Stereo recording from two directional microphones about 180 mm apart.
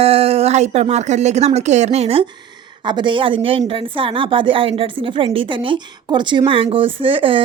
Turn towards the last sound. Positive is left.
turn(degrees=-30)  # may be behind; listen again after turning